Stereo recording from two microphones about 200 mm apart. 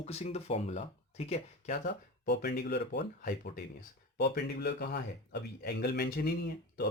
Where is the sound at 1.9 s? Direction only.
55° left (ahead or behind).